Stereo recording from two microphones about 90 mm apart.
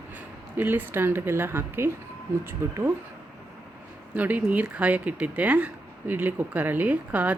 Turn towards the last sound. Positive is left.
turn(degrees=-15)  # may be behind; listen again after turning